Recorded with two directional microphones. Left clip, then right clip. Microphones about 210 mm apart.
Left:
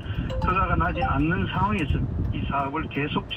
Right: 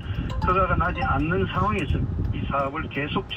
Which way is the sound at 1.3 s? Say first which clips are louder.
Right 1 dB; 25° left (ahead or behind).